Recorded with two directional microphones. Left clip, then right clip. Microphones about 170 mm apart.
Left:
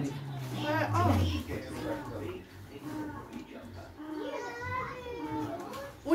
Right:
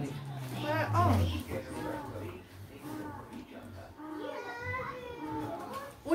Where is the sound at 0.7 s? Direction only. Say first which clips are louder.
Even; centre (ahead or behind).